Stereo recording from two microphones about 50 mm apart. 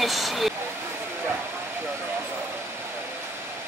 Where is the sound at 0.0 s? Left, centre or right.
Centre.